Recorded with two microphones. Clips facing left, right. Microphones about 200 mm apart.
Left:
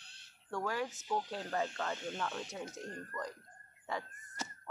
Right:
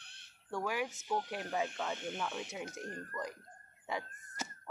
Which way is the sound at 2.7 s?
15° left (ahead or behind).